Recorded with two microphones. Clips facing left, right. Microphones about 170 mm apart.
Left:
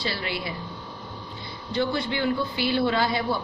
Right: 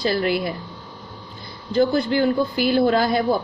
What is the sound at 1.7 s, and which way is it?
A woman's voice, 40° right (ahead or behind).